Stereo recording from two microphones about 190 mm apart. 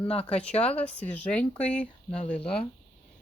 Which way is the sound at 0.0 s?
30° left (ahead or behind).